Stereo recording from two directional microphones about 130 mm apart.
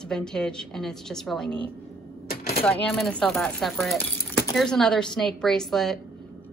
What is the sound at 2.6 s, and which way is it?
A woman's voice, 5° left (ahead or behind).